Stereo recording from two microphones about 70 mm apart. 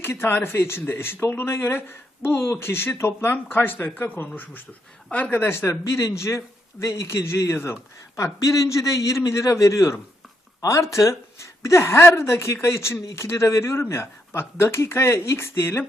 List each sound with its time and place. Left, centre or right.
0.0 s speech: left
5.9 s a man's voice: left